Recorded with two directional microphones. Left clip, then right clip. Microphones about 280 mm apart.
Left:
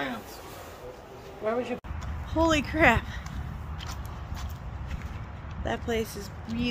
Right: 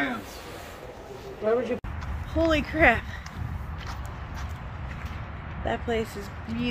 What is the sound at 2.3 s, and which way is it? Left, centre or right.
Speech, centre.